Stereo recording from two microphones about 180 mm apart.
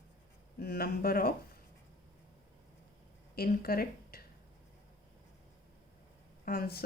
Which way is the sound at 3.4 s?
55° left (ahead or behind).